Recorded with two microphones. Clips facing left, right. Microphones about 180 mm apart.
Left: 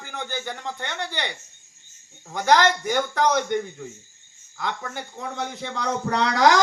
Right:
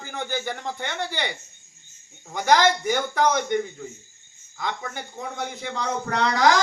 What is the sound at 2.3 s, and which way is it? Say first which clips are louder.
A man's voice: even; 10° right (ahead or behind).